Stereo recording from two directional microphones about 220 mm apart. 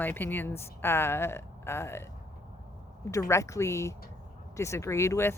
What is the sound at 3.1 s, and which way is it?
Speech, 15° left (ahead or behind).